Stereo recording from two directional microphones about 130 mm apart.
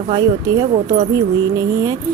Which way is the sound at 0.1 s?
35° right (ahead or behind).